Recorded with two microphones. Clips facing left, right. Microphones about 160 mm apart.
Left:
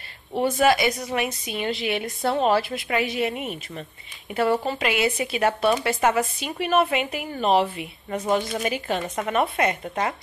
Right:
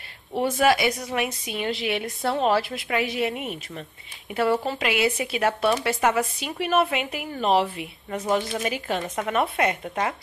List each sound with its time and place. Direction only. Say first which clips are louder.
0.3 s speech: left 1 dB; 5° right (ahead or behind)